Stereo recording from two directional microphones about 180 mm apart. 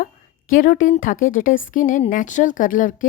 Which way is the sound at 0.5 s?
50° left (ahead or behind).